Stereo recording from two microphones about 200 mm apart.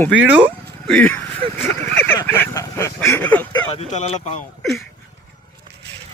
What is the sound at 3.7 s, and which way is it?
Speech, 35° left (ahead or behind).